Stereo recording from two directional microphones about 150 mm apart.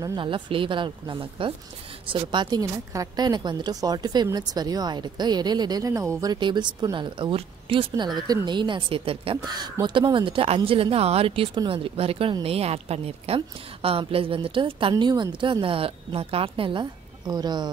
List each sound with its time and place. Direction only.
0.0 s a woman's voice: 30° right (ahead or behind)
9.5 s a woman's voice: 30° right (ahead or behind)